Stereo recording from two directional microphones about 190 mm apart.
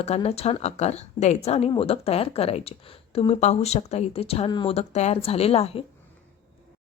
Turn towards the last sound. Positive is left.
turn(degrees=30)  # may be behind; listen again after turning